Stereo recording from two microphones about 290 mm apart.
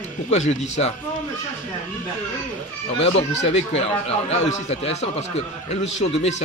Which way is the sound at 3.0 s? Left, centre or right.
Left.